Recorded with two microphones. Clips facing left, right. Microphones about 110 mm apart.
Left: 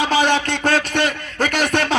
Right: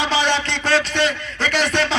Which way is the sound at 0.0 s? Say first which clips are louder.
Left 3 dB; 50° left (ahead or behind).